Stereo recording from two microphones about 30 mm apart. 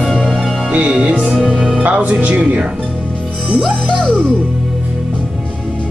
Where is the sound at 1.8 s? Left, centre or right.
Right.